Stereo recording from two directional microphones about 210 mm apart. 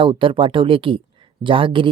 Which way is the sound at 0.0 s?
25° right (ahead or behind).